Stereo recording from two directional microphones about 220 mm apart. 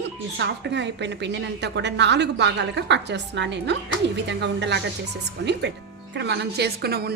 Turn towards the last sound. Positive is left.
turn(degrees=-45)  # may be behind; listen again after turning